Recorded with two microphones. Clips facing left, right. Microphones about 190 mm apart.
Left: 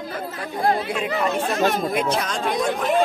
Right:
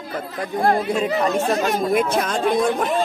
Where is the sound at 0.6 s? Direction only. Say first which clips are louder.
Right 3 dB; 50° right (ahead or behind).